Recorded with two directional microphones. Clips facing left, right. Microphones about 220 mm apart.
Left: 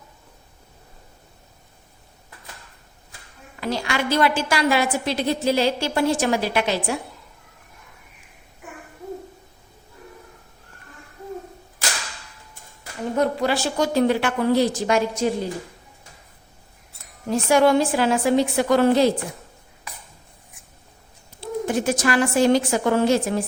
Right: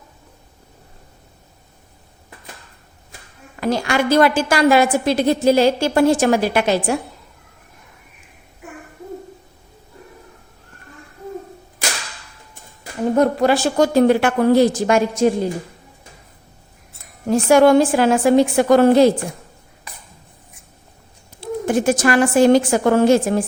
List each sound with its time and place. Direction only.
3.6 s a woman's voice: 50° right (ahead or behind)
13.1 s a woman's voice: 50° right (ahead or behind)
17.2 s a woman's voice: 50° right (ahead or behind)
21.7 s a woman's voice: 50° right (ahead or behind)